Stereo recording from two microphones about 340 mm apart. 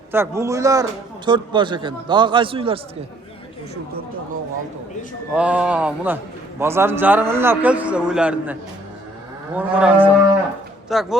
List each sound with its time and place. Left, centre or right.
0.1 s speech: centre
5.3 s a man's voice: centre
9.6 s a man's voice: centre